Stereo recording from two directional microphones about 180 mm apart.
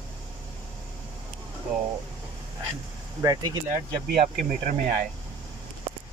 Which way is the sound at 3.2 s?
20° right (ahead or behind).